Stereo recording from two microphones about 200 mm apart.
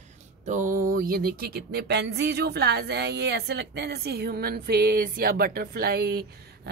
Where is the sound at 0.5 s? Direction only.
40° right (ahead or behind).